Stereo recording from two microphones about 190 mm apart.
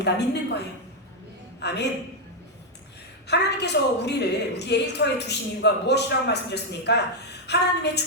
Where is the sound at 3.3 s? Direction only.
65° left (ahead or behind).